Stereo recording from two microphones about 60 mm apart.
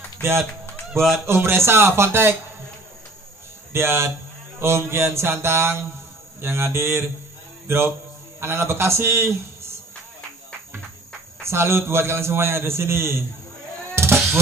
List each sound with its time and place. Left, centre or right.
1.2 s a man's voice: right
3.7 s a man's voice: right
11.4 s a man's voice: right
13.9 s music: right